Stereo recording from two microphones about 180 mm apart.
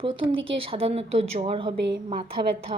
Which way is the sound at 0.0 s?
30° right (ahead or behind).